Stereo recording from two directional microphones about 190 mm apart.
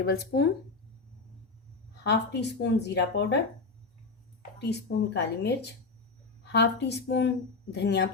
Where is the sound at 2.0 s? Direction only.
65° left (ahead or behind).